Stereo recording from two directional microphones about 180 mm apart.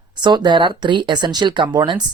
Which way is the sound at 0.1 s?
25° right (ahead or behind).